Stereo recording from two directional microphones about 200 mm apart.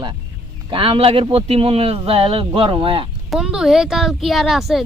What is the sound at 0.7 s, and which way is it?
Speech, 25° right (ahead or behind).